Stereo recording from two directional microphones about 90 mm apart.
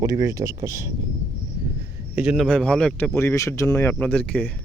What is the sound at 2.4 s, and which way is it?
Speech, 10° left (ahead or behind).